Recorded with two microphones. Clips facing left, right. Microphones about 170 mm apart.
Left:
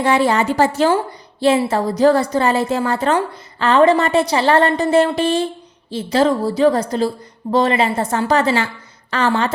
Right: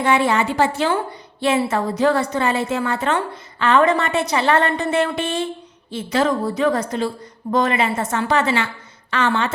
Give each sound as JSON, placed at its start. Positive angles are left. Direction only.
{"t": 0.0, "sound": "a woman's voice", "side_deg": 35}